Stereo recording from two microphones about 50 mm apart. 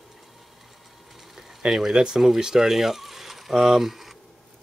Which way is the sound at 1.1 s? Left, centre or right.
Centre.